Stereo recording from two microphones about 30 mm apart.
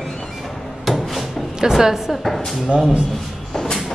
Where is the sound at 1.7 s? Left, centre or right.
Centre.